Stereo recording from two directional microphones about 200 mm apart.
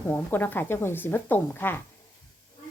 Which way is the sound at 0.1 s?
10° left (ahead or behind).